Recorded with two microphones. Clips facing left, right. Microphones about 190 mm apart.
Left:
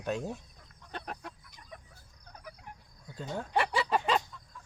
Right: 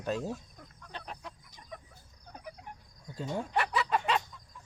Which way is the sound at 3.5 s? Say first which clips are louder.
Left 3 dB; 30° left (ahead or behind).